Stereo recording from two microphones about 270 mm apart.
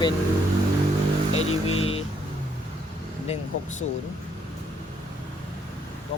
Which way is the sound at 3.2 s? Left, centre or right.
Left.